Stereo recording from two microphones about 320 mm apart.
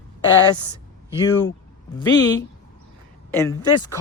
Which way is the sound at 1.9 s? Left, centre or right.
Centre.